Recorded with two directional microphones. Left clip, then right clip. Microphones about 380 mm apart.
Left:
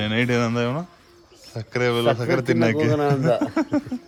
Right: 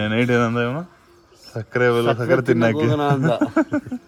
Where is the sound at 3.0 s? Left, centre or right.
Centre.